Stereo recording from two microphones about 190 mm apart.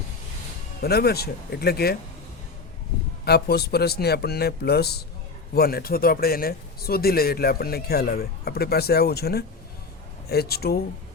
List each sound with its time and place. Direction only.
0.8 s a man's voice: 55° left (ahead or behind)
3.2 s a man's voice: 55° left (ahead or behind)